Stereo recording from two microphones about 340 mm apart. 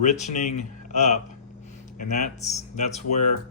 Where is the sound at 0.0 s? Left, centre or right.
Centre.